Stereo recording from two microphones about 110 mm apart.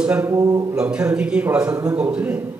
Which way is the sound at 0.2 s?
30° right (ahead or behind).